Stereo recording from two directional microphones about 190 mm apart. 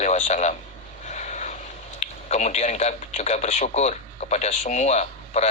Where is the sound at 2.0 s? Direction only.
35° left (ahead or behind).